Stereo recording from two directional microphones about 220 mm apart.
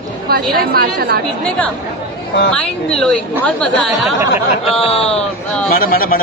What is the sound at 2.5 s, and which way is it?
A woman's voice, 5° left (ahead or behind).